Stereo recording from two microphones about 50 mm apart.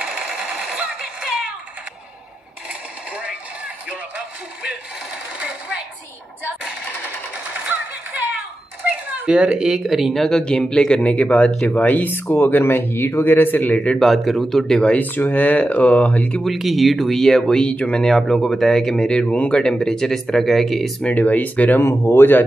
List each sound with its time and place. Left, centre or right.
0.0 s sewing machine: centre
3.1 s a sound: right
7.5 s music: right
8.8 s a sound: right
9.3 s speech: centre
10.4 s speech: centre
11.0 s speech: left
13.9 s speech: centre
15.0 s speech: left
16.4 s speech: centre
17.6 s speech: left
18.0 s speech: centre
21.0 s speech: left
21.8 s speech: left